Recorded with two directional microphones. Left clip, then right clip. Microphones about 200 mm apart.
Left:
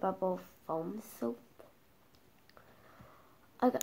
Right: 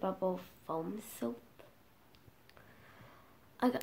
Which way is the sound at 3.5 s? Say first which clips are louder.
Left 3 dB; 5° left (ahead or behind).